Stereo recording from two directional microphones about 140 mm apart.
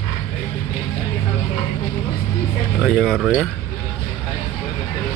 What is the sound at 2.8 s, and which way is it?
Speech, 5° left (ahead or behind).